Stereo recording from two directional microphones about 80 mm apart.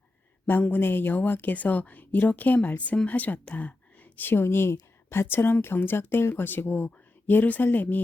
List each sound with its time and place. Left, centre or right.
0.6 s speech: left